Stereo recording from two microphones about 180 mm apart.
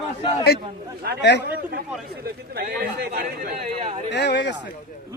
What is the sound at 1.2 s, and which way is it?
Speech, 70° left (ahead or behind).